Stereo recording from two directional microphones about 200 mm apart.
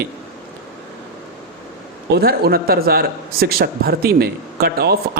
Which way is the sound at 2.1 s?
50° right (ahead or behind).